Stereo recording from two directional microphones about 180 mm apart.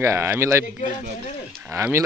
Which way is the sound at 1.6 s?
15° right (ahead or behind).